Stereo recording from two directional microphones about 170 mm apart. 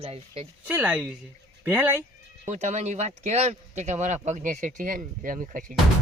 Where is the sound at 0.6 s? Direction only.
10° right (ahead or behind).